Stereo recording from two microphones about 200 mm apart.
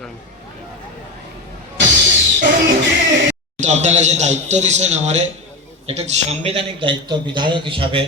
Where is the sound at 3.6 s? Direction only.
35° right (ahead or behind).